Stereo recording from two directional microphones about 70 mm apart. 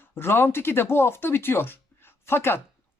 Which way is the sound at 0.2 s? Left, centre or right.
Left.